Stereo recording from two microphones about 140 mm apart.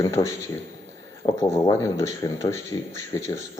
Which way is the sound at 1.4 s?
20° left (ahead or behind).